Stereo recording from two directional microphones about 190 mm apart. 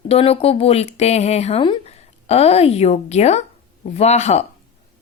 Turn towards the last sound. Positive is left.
turn(degrees=35)  # may be behind; listen again after turning